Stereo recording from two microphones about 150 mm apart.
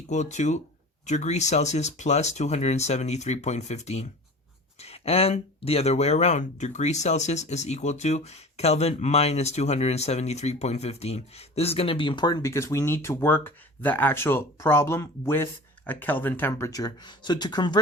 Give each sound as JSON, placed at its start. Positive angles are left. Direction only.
{"t": 0.1, "sound": "speech", "side_deg": 50}